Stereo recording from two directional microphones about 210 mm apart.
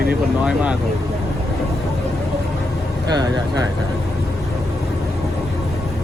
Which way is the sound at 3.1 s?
20° right (ahead or behind).